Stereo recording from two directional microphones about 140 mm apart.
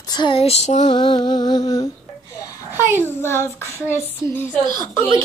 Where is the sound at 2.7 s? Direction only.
15° right (ahead or behind).